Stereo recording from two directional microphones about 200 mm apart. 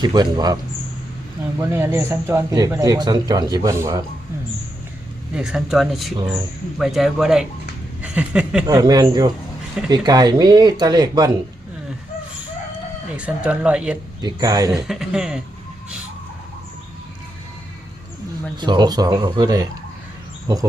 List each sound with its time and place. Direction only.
0.0 s speech: 20° right (ahead or behind)
1.7 s speech: 10° right (ahead or behind)
5.3 s speech: 5° right (ahead or behind)
8.6 s speech: 20° right (ahead or behind)
13.1 s speech: 5° right (ahead or behind)
14.2 s speech: 20° right (ahead or behind)
14.8 s speech: 5° right (ahead or behind)
18.5 s speech: 20° right (ahead or behind)